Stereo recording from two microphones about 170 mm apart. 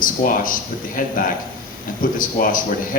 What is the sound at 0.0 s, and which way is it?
A man's voice, 55° left (ahead or behind).